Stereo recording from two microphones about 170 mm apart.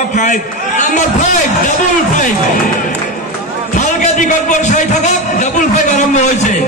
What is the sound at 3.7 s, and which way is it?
A man's voice, 50° left (ahead or behind).